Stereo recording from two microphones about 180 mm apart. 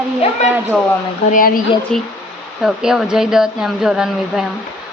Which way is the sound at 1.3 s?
50° left (ahead or behind).